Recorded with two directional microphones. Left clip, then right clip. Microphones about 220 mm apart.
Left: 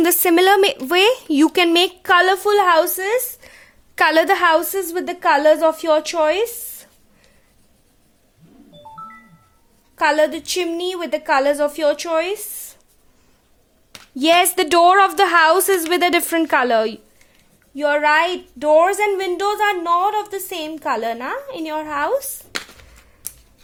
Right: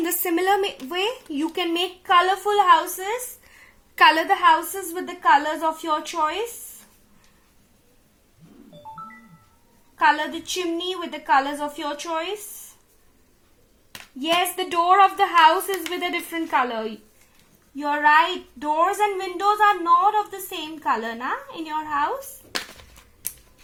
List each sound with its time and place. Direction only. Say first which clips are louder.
0.0 s a woman's voice: left 9 dB; 40° left (ahead or behind)
3.6 s a woman's voice: right 1 dB; 35° left (ahead or behind)
10.0 s a woman's voice: left 4 dB; 50° left (ahead or behind)
14.2 s a woman's voice: left 8 dB; 50° left (ahead or behind)